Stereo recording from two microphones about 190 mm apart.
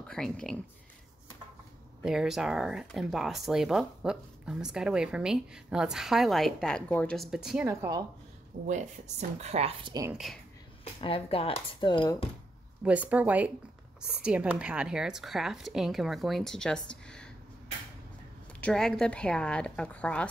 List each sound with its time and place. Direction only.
0.1 s speech: 5° left (ahead or behind)
2.0 s speech: centre (ahead or behind)
8.6 s speech: 40° right (ahead or behind)
10.1 s speech: centre (ahead or behind)
10.8 s speech: 30° left (ahead or behind)
12.8 s speech: 5° right (ahead or behind)
18.6 s speech: 5° left (ahead or behind)